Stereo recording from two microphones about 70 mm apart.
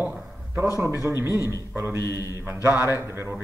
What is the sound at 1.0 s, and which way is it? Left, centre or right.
A man's voice, right.